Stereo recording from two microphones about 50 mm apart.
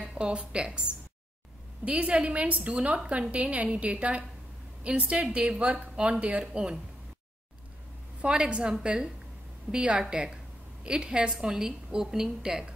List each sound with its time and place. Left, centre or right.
0.0 s a woman's voice: right
8.2 s a woman's voice: right